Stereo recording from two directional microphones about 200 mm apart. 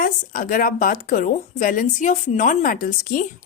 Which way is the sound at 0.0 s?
45° left (ahead or behind).